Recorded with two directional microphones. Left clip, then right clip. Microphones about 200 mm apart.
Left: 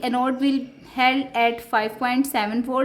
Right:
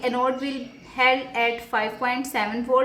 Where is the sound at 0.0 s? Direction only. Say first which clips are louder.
Left 1 dB; 50° left (ahead or behind).